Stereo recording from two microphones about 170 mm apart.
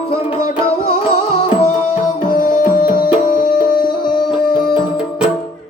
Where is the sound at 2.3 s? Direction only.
55° left (ahead or behind).